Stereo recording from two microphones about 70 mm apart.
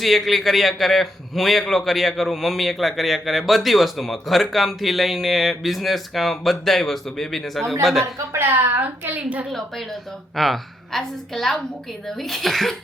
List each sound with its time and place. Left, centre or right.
0.0 s a man's voice: centre
8.3 s a woman's voice: right
9.5 s a man's voice: centre